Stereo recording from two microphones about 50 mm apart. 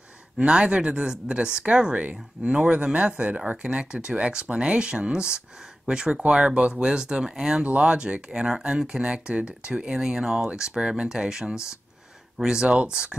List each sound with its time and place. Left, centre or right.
0.4 s speech: right
7.6 s speech: right